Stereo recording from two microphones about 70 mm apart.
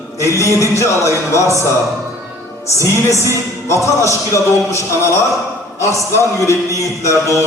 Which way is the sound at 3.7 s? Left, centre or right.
Left.